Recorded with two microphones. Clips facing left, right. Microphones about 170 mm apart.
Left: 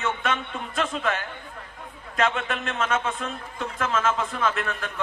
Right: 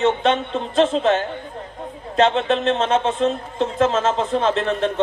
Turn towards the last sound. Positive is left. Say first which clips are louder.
# right 8 dB
turn(degrees=-25)  # may be behind; listen again after turning